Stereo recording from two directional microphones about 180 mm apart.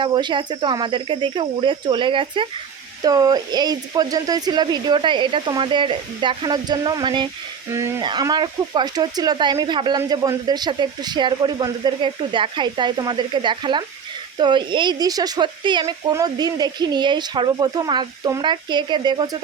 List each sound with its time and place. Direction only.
0.0 s speech: 25° right (ahead or behind)
7.7 s speech: 15° right (ahead or behind)